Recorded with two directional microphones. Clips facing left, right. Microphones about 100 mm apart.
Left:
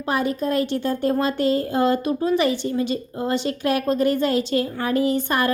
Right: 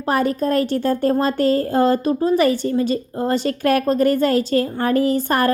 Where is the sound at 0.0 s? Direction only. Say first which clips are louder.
Right 4 dB; 45° right (ahead or behind).